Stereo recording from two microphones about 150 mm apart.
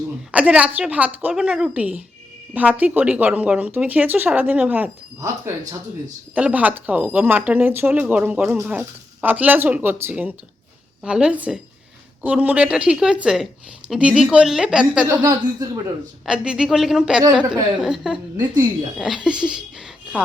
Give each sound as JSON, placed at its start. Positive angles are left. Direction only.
{"t": 0.3, "sound": "speech", "side_deg": -10}
{"t": 6.3, "sound": "a woman's voice", "side_deg": -10}
{"t": 15.2, "sound": "speech", "side_deg": -25}
{"t": 16.2, "sound": "a woman's voice", "side_deg": -5}